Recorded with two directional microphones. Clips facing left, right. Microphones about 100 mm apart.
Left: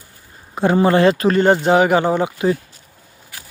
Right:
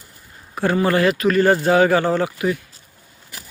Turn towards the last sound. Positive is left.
turn(degrees=20)  # may be behind; listen again after turning